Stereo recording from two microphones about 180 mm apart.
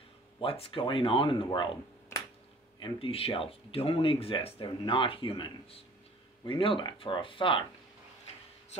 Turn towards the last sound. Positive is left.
turn(degrees=30)  # may be behind; listen again after turning